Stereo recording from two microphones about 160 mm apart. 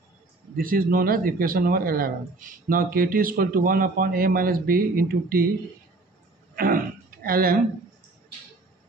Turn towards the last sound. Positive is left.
turn(degrees=-65)  # may be behind; listen again after turning